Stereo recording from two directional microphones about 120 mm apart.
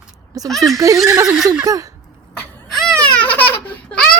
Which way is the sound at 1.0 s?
30° right (ahead or behind).